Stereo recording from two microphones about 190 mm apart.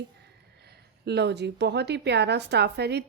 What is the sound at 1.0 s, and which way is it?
A woman's voice, 60° right (ahead or behind).